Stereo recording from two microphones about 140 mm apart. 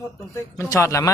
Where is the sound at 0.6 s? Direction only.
20° left (ahead or behind).